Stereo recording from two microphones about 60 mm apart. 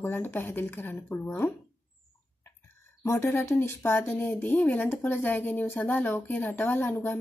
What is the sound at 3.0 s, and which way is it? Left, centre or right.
Speech, left.